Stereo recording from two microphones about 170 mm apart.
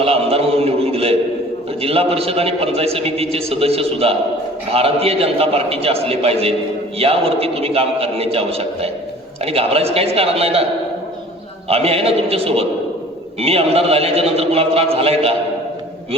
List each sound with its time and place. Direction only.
0.0 s a sound: 35° right (ahead or behind)
1.8 s a man's voice: 35° right (ahead or behind)
11.7 s a man's voice: 35° right (ahead or behind)